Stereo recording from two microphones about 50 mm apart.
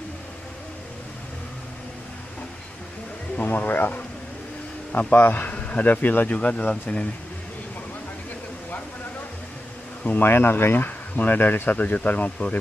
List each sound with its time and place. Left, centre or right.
3.4 s speech: left
10.1 s speech: left
11.7 s speech: left